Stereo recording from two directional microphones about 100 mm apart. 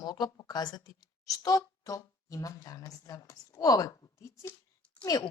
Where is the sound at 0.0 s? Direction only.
40° left (ahead or behind).